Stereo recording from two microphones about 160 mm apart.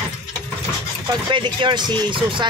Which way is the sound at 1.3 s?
30° right (ahead or behind).